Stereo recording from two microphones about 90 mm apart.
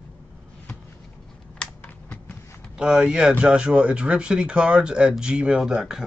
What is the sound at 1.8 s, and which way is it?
Computer keyboard, 15° left (ahead or behind).